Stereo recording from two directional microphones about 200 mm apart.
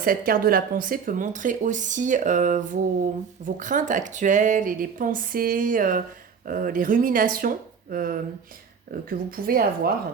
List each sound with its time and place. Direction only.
0.0 s speech: 45° right (ahead or behind)